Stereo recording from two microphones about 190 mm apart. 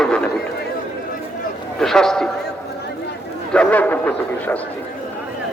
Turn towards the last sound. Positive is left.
turn(degrees=10)  # may be behind; listen again after turning